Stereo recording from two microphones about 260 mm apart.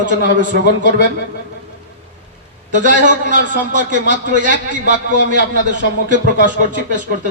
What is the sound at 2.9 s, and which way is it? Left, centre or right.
A man's voice, right.